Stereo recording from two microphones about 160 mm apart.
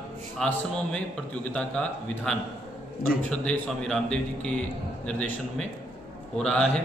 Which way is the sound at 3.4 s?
5° left (ahead or behind).